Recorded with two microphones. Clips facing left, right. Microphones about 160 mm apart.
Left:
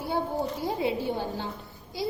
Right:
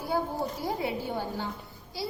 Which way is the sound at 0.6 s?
20° left (ahead or behind).